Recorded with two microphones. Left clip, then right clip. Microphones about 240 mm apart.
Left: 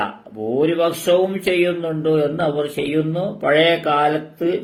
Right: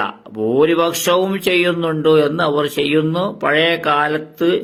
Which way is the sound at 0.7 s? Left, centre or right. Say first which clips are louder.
Right 2 dB; right.